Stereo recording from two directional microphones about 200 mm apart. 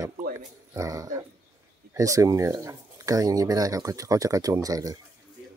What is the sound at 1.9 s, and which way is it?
Speech, 15° right (ahead or behind).